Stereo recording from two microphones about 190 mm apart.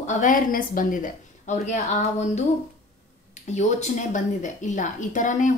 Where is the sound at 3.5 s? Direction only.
40° left (ahead or behind).